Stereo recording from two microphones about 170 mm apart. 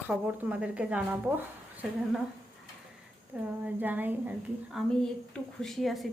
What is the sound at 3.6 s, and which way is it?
Speech, 10° right (ahead or behind).